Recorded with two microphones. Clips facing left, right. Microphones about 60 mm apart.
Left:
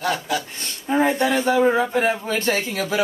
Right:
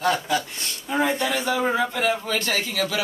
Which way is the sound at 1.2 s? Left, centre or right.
Left.